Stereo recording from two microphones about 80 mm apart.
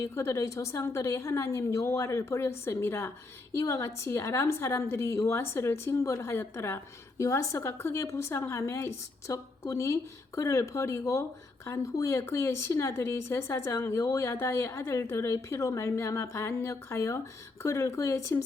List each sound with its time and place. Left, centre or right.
0.0 s a woman's voice: left
3.5 s a woman's voice: left